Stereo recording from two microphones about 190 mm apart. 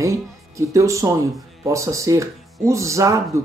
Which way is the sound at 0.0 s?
15° right (ahead or behind).